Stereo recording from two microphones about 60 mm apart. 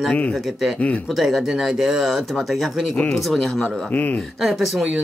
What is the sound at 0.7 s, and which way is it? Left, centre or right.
Speech, left.